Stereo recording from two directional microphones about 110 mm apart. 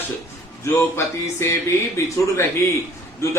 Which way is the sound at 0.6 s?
25° left (ahead or behind).